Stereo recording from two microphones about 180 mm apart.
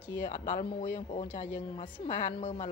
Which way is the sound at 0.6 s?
30° left (ahead or behind).